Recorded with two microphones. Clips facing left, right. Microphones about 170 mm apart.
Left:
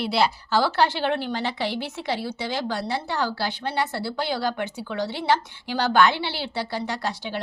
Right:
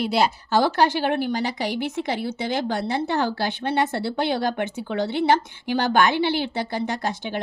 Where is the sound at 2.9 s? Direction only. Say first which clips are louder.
Right 3 dB; 50° right (ahead or behind).